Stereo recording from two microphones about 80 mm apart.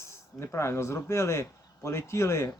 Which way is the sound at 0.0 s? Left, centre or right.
Left.